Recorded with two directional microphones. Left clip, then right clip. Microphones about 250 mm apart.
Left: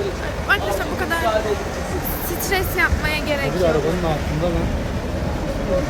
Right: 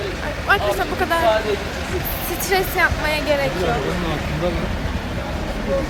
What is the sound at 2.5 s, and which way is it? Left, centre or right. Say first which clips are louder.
Speech: right 2 dB; centre.